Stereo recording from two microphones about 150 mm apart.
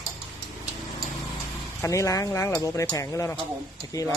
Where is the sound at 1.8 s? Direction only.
20° left (ahead or behind).